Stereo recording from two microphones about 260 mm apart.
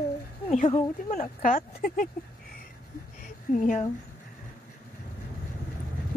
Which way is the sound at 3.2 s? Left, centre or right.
Left.